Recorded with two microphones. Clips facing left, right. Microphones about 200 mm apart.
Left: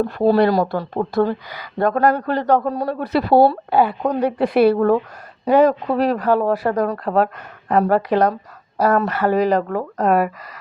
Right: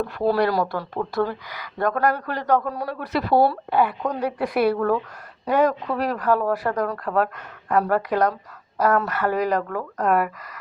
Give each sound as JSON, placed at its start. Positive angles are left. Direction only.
{"t": 0.0, "sound": "speech", "side_deg": 25}